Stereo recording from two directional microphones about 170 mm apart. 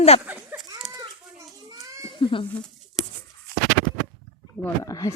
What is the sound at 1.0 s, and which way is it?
Children playing, 20° right (ahead or behind).